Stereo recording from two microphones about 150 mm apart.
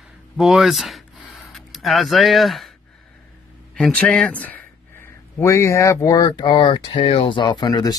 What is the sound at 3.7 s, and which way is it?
Speech, 5° left (ahead or behind).